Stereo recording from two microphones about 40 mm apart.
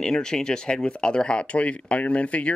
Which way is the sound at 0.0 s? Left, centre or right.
Centre.